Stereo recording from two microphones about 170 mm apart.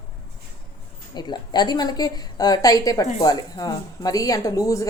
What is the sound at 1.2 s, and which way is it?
A woman's voice, 25° left (ahead or behind).